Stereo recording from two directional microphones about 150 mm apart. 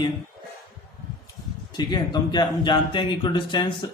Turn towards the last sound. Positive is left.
turn(degrees=30)  # may be behind; listen again after turning